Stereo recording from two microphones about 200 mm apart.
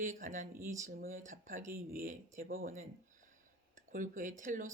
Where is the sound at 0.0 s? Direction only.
40° right (ahead or behind).